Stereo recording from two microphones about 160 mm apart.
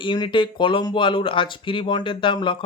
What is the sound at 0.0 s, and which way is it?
Speech, 30° left (ahead or behind).